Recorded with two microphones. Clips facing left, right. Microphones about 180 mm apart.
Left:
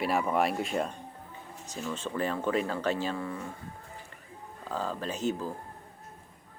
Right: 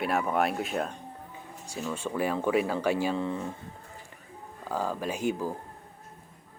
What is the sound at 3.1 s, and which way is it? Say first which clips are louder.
Speech: right 5 dB; 20° right (ahead or behind).